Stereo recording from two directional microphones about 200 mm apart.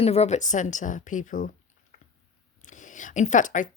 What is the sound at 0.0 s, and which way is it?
Speech, 30° left (ahead or behind).